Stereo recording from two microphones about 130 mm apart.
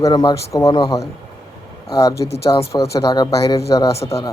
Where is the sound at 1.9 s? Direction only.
25° left (ahead or behind).